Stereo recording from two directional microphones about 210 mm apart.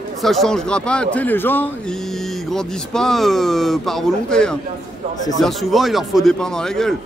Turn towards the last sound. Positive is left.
turn(degrees=0)  # may be behind; listen again after turning